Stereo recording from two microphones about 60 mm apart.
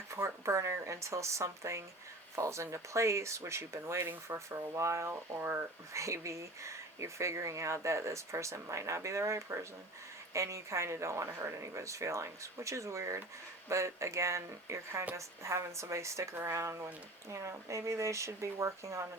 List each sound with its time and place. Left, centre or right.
0.1 s speech: right
5.9 s speech: right